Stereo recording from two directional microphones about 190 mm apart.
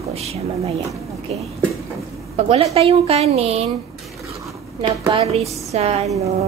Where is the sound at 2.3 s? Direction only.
35° right (ahead or behind).